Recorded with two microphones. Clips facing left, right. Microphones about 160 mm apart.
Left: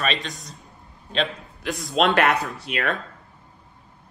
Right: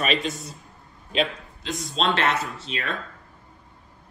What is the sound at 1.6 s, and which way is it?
Speech, 20° right (ahead or behind).